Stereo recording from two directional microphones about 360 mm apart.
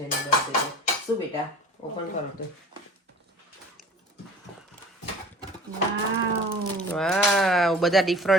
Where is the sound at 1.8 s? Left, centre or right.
Centre.